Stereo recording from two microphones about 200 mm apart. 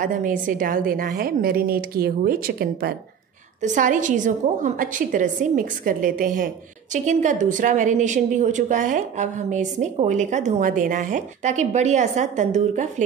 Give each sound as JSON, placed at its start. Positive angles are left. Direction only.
{"t": 0.0, "sound": "a woman's voice", "side_deg": -40}